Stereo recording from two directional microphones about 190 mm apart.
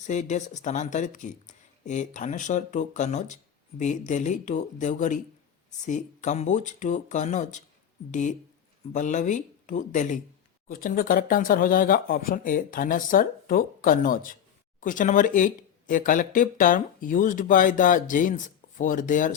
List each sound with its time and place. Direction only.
0.1 s speech: 40° left (ahead or behind)